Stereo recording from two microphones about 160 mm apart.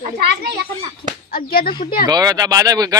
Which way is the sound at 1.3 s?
65° left (ahead or behind).